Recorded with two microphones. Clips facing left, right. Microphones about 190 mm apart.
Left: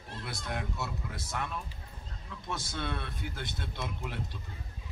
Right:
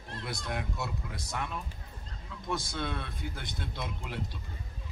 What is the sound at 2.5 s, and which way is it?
Speech, 15° right (ahead or behind).